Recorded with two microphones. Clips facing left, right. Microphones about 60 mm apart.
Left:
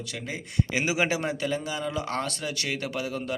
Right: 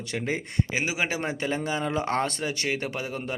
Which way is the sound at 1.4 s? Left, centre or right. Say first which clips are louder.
Right 1 dB; right.